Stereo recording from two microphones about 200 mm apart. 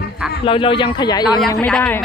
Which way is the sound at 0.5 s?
25° left (ahead or behind).